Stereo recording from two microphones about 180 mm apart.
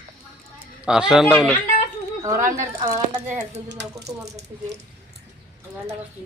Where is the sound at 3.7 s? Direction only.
20° right (ahead or behind).